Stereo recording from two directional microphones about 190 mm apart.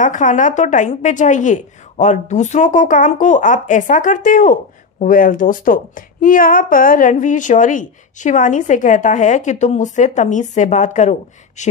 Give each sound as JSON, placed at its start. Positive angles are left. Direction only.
{"t": 0.0, "sound": "a woman's voice", "side_deg": 40}